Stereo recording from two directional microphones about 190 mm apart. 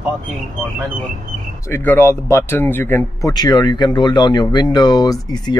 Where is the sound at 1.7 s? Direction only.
10° left (ahead or behind).